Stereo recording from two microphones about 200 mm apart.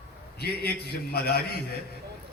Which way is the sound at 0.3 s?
55° left (ahead or behind).